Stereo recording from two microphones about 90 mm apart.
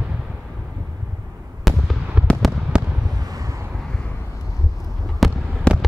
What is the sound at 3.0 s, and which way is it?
Fireworks, 45° right (ahead or behind).